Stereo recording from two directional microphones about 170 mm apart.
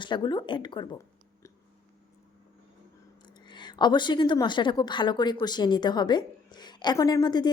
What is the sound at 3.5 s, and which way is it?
A woman's voice, 25° left (ahead or behind).